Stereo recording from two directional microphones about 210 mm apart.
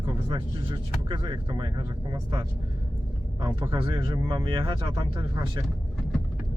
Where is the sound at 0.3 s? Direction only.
25° right (ahead or behind).